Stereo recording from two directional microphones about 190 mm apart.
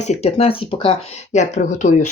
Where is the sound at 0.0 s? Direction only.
35° left (ahead or behind).